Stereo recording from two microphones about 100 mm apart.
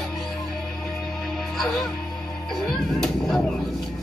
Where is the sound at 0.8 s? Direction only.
Centre (ahead or behind).